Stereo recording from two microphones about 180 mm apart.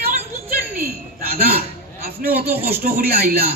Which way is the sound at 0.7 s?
55° right (ahead or behind).